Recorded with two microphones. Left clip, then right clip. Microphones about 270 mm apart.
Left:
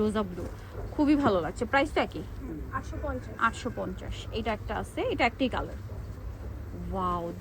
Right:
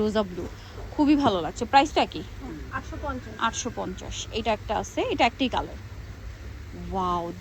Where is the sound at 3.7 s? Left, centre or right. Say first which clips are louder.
Right 3 dB; centre.